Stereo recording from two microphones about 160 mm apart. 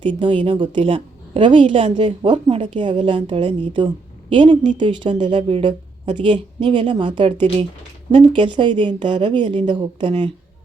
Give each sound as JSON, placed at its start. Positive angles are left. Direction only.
{"t": 0.0, "sound": "a woman's voice", "side_deg": -30}